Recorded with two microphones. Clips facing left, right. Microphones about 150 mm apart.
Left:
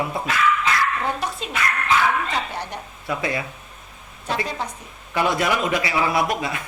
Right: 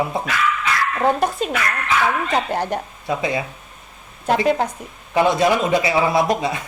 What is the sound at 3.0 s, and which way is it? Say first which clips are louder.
Speech: right 3 dB; 20° right (ahead or behind).